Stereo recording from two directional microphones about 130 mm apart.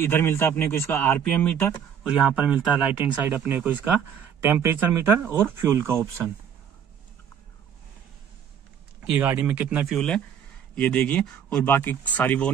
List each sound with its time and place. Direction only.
0.0 s speech: 20° left (ahead or behind)
2.0 s speech: 10° right (ahead or behind)
9.2 s speech: 15° right (ahead or behind)
9.8 s speech: 5° left (ahead or behind)